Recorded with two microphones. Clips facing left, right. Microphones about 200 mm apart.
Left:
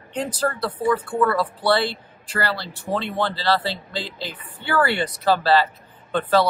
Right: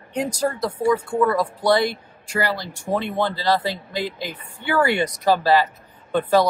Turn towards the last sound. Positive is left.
turn(degrees=-15)  # may be behind; listen again after turning